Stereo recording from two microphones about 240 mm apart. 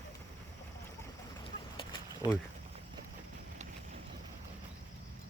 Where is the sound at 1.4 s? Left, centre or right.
Centre.